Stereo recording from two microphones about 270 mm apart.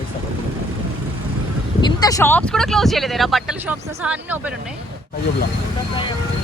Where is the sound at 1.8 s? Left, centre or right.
Centre.